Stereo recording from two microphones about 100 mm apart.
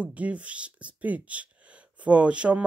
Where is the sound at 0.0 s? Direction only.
15° right (ahead or behind).